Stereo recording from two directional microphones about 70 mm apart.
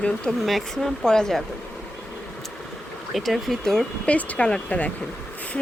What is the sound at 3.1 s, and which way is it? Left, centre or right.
Speech, centre.